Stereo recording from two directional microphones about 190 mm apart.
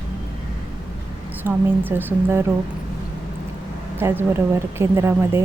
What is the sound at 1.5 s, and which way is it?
A woman's voice, 10° right (ahead or behind).